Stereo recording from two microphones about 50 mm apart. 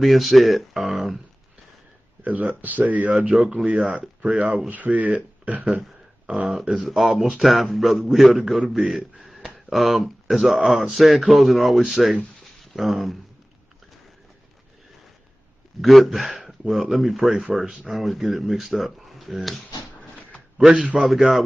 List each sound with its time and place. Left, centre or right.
0.0 s speech: centre
2.2 s speech: right
3.3 s speech: centre
3.6 s speech: right
6.9 s speech: centre
15.8 s speech: centre
20.7 s speech: right
21.0 s speech: centre